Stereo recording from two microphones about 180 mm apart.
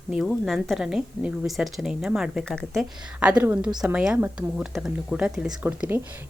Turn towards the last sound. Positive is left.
turn(degrees=-10)  # may be behind; listen again after turning